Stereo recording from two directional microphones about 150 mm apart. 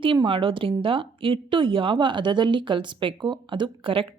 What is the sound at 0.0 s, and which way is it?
A woman's voice, 35° right (ahead or behind).